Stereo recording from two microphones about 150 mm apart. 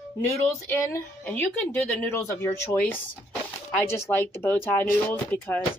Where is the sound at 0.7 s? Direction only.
20° left (ahead or behind).